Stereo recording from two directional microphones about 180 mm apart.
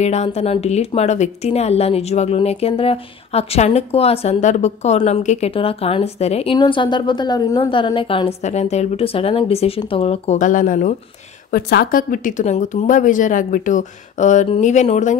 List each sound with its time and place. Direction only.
0.0 s speech: 40° left (ahead or behind)
11.5 s a woman's voice: 60° left (ahead or behind); by 15.1 s 40° left (ahead or behind)